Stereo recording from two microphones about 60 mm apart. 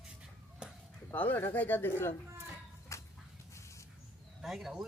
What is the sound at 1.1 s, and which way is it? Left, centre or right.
Speech, left.